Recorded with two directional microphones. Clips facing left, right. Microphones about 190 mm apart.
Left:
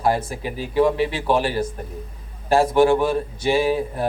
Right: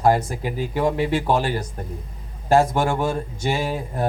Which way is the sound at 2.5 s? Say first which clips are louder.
Left 3 dB; 45° right (ahead or behind).